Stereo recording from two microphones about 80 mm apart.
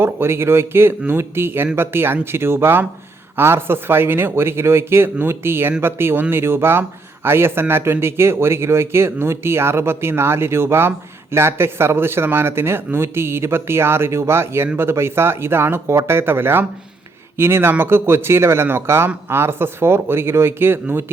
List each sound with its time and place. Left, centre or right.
0.0 s speech: right